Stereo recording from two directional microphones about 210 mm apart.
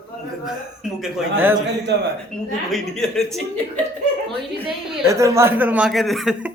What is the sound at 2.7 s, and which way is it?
Speech, centre (ahead or behind).